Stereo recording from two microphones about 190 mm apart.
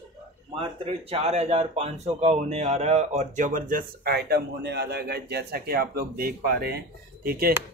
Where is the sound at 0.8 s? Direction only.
30° right (ahead or behind); by 7.5 s 50° right (ahead or behind).